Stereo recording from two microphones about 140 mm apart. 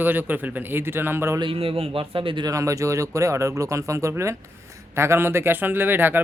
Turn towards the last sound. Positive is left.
turn(degrees=-15)  # may be behind; listen again after turning